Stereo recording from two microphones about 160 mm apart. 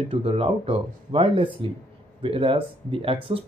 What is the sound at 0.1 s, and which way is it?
Speech, 40° right (ahead or behind).